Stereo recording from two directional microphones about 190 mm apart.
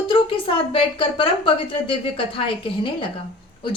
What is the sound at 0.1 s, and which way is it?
A woman's voice, 30° left (ahead or behind).